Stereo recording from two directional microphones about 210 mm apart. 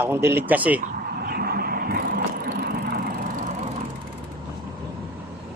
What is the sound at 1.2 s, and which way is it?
Vehicle, 45° right (ahead or behind).